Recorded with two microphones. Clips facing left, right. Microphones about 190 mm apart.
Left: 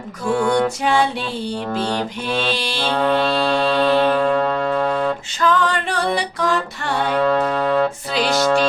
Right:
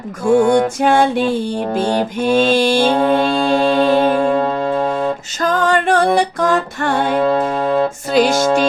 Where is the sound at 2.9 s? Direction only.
20° right (ahead or behind).